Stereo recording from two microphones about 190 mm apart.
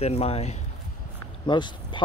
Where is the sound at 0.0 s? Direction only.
35° left (ahead or behind).